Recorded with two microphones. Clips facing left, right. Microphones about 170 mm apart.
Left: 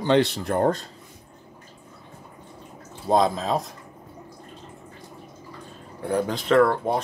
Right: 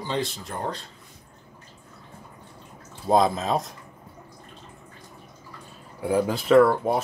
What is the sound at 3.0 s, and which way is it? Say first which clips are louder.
Speech: even; centre (ahead or behind).